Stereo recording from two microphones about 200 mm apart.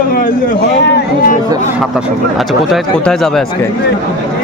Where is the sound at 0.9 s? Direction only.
45° left (ahead or behind).